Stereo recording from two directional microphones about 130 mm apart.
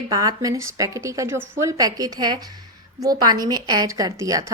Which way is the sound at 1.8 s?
30° right (ahead or behind).